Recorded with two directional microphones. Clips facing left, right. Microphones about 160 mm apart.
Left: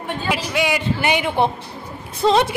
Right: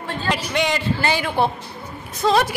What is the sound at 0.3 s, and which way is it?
A man's voice, 5° left (ahead or behind).